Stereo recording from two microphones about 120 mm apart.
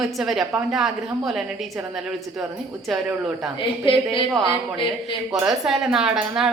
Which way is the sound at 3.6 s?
45° left (ahead or behind).